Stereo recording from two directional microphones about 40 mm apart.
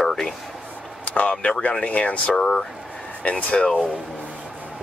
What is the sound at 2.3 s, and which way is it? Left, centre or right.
Speech, left.